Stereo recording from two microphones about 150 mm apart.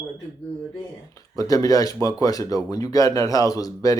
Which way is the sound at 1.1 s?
25° left (ahead or behind).